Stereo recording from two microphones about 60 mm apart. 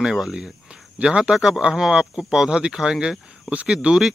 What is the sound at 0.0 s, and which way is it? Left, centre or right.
Speech, centre.